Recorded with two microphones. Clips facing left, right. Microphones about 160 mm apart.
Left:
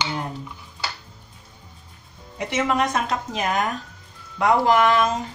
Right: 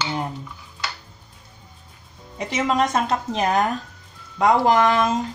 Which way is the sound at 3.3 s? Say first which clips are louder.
Right 4 dB; 30° right (ahead or behind).